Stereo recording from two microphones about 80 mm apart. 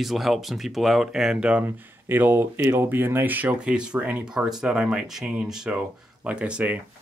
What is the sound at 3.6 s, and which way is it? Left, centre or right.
Speech, centre.